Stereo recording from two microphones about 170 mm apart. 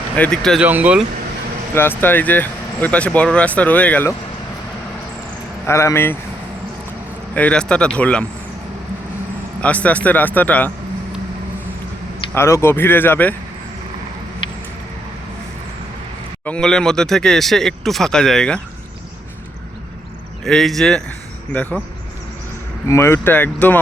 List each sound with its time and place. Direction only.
0.2 s speech: 5° left (ahead or behind)
0.6 s speech: 10° right (ahead or behind)
1.7 s speech: 10° left (ahead or behind)
5.6 s speech: 15° left (ahead or behind)
7.3 s speech: 5° left (ahead or behind)
9.6 s speech: 10° left (ahead or behind)
12.3 s speech: 15° left (ahead or behind)
16.5 s speech: 5° left (ahead or behind)
20.4 s speech: centre (ahead or behind)
22.9 s speech: 15° left (ahead or behind)